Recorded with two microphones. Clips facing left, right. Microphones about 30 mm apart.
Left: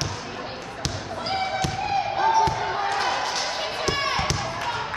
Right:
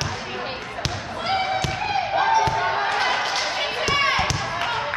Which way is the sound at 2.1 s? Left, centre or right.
Right.